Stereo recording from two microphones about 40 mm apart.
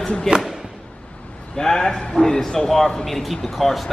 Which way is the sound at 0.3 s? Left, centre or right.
Centre.